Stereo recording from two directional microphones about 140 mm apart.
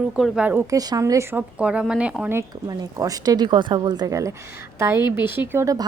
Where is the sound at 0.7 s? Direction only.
25° right (ahead or behind).